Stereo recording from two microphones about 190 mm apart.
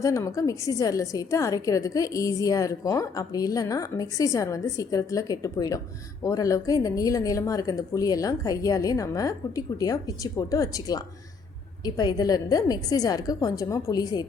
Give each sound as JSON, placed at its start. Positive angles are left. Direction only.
{"t": 0.0, "sound": "a woman's voice", "side_deg": 15}